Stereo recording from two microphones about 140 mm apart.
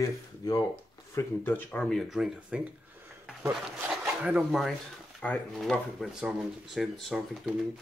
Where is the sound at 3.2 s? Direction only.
5° right (ahead or behind).